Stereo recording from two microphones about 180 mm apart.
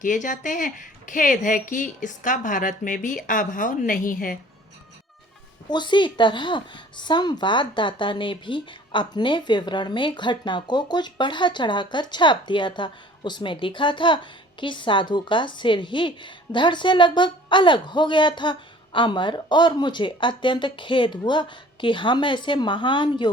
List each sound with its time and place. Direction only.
0.0 s a woman's voice: 45° left (ahead or behind)
5.6 s a woman's voice: 25° left (ahead or behind)